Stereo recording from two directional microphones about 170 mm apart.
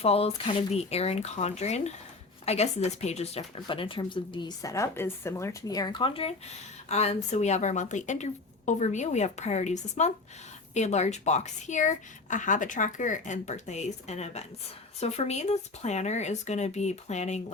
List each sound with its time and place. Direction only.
0.0 s a woman's voice: 35° left (ahead or behind)